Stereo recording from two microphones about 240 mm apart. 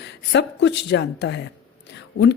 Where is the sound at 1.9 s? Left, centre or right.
Left.